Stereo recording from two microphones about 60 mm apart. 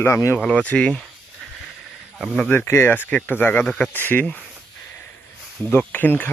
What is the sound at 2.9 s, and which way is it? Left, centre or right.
Speech, left.